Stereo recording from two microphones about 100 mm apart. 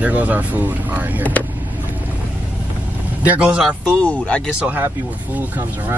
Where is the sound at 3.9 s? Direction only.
10° left (ahead or behind).